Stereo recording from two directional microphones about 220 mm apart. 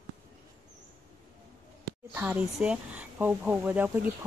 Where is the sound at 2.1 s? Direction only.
5° right (ahead or behind).